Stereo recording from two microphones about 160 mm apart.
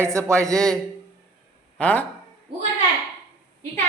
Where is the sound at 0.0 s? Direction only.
20° right (ahead or behind).